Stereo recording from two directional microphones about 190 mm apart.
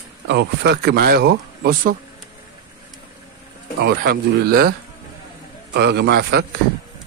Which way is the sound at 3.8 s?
60° right (ahead or behind).